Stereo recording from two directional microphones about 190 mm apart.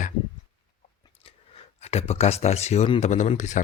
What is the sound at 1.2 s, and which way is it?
Speech, 30° left (ahead or behind).